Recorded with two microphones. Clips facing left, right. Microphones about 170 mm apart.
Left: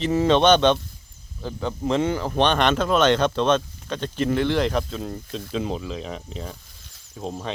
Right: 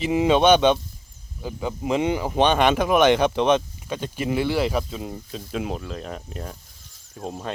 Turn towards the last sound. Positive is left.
turn(degrees=-5)  # may be behind; listen again after turning